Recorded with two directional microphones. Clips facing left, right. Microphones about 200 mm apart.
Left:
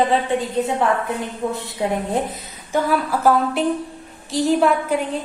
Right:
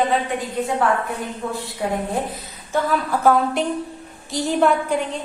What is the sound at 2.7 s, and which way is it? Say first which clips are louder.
A woman's voice: left 1 dB; 5° left (ahead or behind).